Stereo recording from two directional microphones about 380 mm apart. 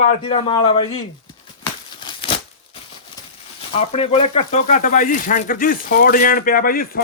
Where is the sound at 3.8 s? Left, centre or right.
Centre.